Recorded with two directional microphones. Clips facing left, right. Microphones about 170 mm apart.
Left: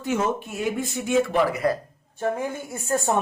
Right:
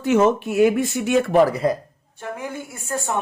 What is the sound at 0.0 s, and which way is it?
Speech, 75° right (ahead or behind).